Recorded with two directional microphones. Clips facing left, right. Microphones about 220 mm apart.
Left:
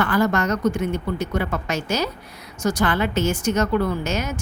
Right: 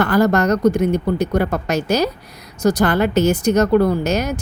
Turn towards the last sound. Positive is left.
turn(degrees=-40)  # may be behind; listen again after turning